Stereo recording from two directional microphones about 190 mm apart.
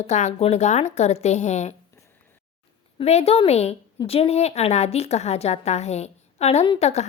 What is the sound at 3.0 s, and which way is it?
A woman's voice, 35° left (ahead or behind).